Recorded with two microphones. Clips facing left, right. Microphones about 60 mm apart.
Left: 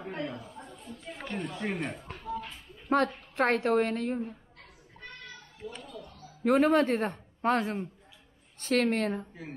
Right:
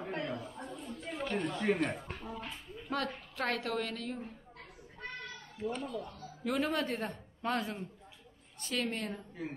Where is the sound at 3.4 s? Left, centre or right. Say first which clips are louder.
Left 9 dB; left.